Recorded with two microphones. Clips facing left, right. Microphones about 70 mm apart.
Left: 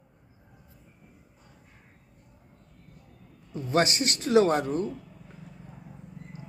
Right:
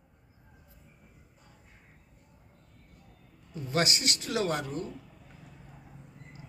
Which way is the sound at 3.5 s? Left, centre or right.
Left.